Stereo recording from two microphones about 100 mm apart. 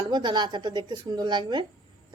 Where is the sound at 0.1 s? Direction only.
50° right (ahead or behind).